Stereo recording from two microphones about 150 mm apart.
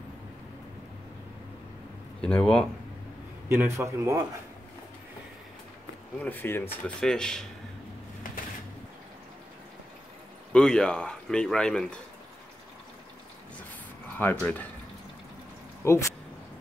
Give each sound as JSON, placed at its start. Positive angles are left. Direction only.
{"t": 2.2, "sound": "speech", "side_deg": 5}
{"t": 3.4, "sound": "a man's voice", "side_deg": -15}
{"t": 6.1, "sound": "speech", "side_deg": 10}
{"t": 7.0, "sound": "speech", "side_deg": 5}
{"t": 10.5, "sound": "speech", "side_deg": 5}
{"t": 14.1, "sound": "speech", "side_deg": 10}
{"t": 15.8, "sound": "speech", "side_deg": 20}